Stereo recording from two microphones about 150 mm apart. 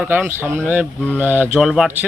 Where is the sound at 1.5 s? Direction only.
Centre (ahead or behind).